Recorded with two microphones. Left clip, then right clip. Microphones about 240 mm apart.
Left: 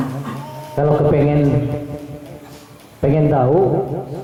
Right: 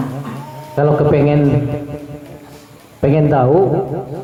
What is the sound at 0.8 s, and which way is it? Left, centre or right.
Speech, centre.